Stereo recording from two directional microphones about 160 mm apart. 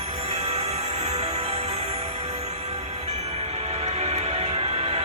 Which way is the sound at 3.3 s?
40° right (ahead or behind).